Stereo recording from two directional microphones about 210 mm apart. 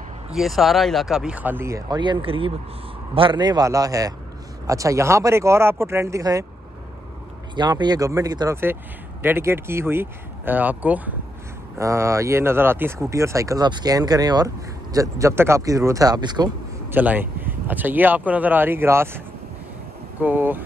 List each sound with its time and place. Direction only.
0.3 s speech: centre (ahead or behind)
7.5 s speech: 20° right (ahead or behind)
16.9 s speech: 10° right (ahead or behind)